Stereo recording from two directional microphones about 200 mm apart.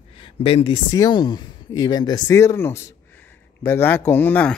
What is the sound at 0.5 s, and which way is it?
Speech, 25° left (ahead or behind).